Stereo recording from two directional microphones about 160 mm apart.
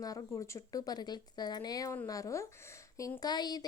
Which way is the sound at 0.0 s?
20° left (ahead or behind).